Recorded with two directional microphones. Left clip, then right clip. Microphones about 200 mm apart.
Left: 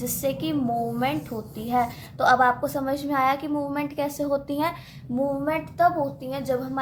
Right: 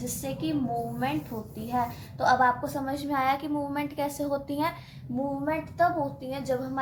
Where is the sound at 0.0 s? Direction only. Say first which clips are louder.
Left 6 dB; 40° left (ahead or behind).